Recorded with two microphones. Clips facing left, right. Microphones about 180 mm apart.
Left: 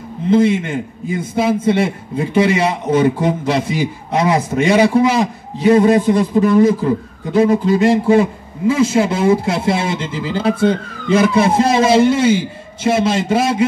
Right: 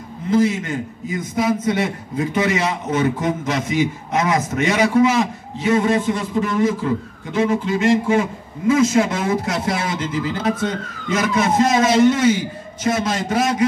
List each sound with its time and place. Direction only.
0.3 s a man's voice: 30° left (ahead or behind)